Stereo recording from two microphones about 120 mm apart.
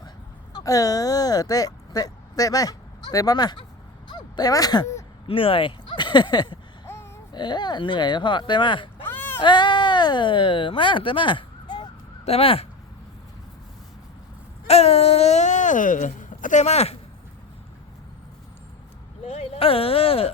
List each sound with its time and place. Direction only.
0.5 s speech: 30° left (ahead or behind)
5.3 s speech: 50° left (ahead or behind)
6.8 s babbling: 20° left (ahead or behind)
7.3 s speech: 40° left (ahead or behind)
9.0 s a sound: 15° left (ahead or behind)
9.4 s speech: 40° left (ahead or behind)
12.2 s speech: 55° left (ahead or behind)
14.7 s speech: 60° left (ahead or behind)
19.2 s speech: 60° left (ahead or behind)